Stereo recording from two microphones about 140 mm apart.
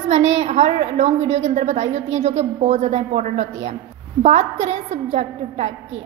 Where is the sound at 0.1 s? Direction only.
50° right (ahead or behind).